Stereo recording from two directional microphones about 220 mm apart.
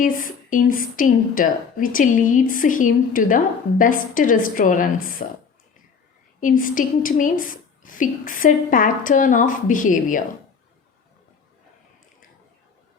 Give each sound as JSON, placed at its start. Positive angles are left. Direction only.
{"t": 0.0, "sound": "a woman's voice", "side_deg": 35}
{"t": 6.4, "sound": "a woman's voice", "side_deg": 40}